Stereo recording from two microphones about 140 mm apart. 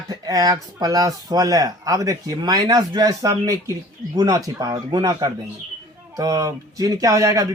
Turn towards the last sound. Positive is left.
turn(degrees=-25)  # may be behind; listen again after turning